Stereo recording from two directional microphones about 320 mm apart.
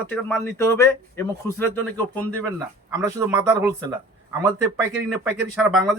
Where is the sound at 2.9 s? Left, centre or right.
Centre.